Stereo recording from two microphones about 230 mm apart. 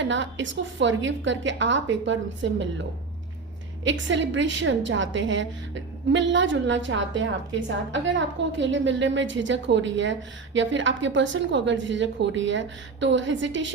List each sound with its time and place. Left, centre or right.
0.0 s a woman's voice: right
3.8 s a woman's voice: right